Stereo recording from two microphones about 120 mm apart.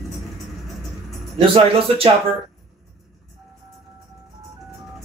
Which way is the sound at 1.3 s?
50° right (ahead or behind).